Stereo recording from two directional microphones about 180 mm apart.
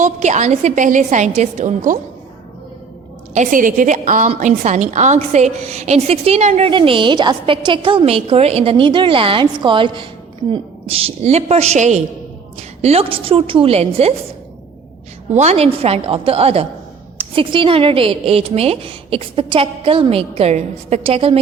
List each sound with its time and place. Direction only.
0.0 s a woman's voice: 40° right (ahead or behind)
3.3 s a woman's voice: 45° right (ahead or behind)
15.3 s a woman's voice: 40° right (ahead or behind)